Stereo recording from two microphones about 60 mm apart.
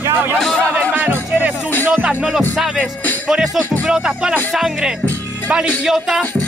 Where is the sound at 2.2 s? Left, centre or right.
Centre.